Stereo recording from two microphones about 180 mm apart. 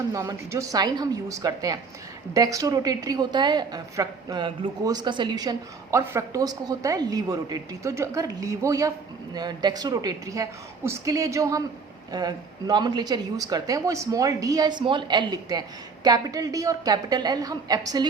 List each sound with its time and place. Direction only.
0.1 s a woman's voice: 20° right (ahead or behind)